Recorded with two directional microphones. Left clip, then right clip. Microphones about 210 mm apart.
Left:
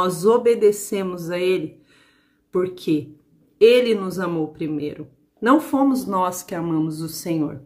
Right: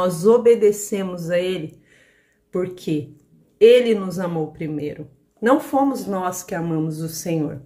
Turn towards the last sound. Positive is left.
turn(degrees=5)  # may be behind; listen again after turning